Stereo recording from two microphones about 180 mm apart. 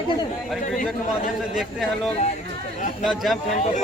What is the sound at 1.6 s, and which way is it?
A man's voice, centre (ahead or behind).